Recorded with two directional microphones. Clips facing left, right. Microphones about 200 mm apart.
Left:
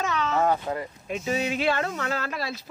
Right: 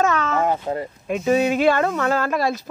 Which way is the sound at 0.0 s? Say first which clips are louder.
Right 6 dB; 50° right (ahead or behind).